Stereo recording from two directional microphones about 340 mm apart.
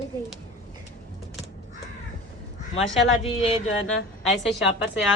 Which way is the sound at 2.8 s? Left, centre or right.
Centre.